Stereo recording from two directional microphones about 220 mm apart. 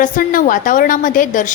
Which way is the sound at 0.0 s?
40° left (ahead or behind).